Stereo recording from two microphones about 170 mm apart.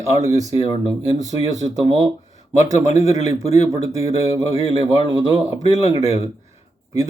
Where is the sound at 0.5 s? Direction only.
30° left (ahead or behind).